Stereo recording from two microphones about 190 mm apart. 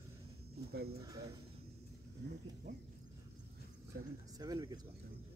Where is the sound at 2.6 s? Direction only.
40° right (ahead or behind).